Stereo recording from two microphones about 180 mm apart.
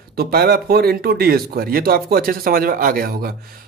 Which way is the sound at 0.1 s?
60° right (ahead or behind).